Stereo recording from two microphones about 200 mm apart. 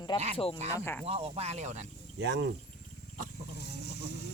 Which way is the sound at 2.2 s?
60° right (ahead or behind).